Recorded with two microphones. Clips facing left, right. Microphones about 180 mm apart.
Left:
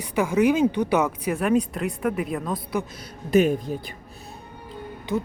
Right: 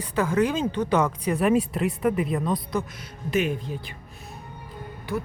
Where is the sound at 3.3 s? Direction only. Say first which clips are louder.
Left 6 dB; 40° left (ahead or behind).